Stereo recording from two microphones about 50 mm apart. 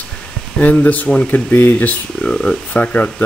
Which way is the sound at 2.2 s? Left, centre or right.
Centre.